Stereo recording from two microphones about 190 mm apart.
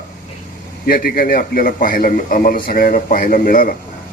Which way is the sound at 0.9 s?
50° left (ahead or behind).